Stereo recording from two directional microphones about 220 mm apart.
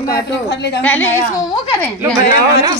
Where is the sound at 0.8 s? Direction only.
10° left (ahead or behind).